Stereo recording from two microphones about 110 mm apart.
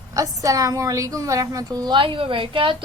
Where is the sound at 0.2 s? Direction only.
30° right (ahead or behind).